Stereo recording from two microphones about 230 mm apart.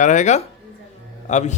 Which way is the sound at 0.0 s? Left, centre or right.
Left.